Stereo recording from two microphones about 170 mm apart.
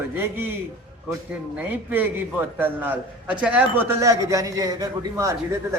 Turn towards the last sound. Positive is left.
turn(degrees=-15)  # may be behind; listen again after turning